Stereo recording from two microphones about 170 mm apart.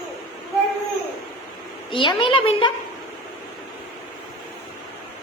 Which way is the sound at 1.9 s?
30° left (ahead or behind).